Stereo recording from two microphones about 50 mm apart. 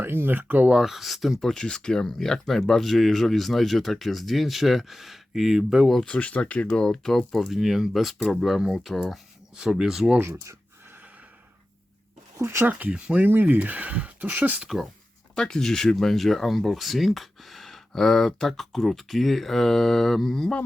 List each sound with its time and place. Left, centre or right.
0.0 s speech: right
0.7 s speech: centre
1.5 s speech: centre
6.1 s speech: left; by 8.7 s centre
9.6 s speech: centre
12.4 s speech: right
13.1 s speech: right
15.4 s speech: centre